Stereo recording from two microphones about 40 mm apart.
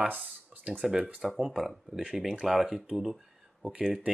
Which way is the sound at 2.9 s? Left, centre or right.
Centre.